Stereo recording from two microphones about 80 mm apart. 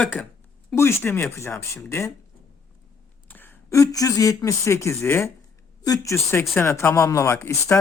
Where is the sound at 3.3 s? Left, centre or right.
Left.